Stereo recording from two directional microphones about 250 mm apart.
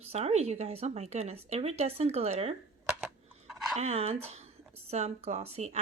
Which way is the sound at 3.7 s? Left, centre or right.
Right.